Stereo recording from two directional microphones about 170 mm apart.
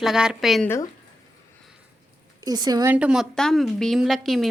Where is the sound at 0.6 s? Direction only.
15° left (ahead or behind).